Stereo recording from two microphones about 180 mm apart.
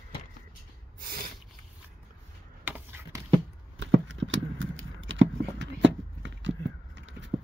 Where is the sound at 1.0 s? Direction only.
55° right (ahead or behind).